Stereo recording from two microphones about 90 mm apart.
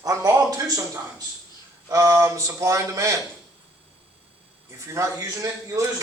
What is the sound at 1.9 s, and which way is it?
Speech, 35° right (ahead or behind).